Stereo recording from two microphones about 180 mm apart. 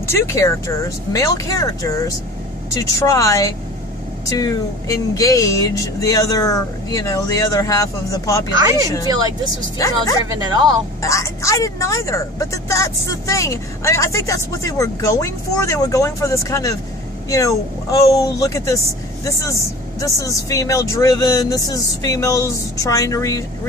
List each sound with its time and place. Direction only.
0.0 s a woman's voice: 15° left (ahead or behind)
9.0 s speech: 20° right (ahead or behind)
9.8 s speech: 20° left (ahead or behind)
10.3 s speech: 20° right (ahead or behind)
11.0 s a woman's voice: 15° left (ahead or behind)